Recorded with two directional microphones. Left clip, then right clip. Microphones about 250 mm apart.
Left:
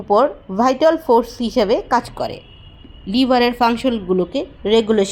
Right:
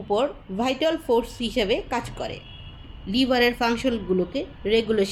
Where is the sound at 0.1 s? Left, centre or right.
Left.